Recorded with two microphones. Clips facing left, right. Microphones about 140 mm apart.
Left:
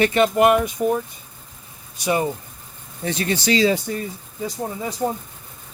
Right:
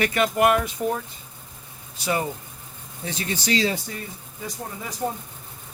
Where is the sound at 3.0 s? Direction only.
70° left (ahead or behind); by 3.8 s 85° left.